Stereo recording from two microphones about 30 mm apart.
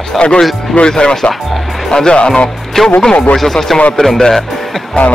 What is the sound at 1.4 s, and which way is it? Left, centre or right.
Music, centre.